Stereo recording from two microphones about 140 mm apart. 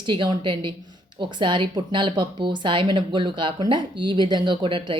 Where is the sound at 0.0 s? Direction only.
35° right (ahead or behind).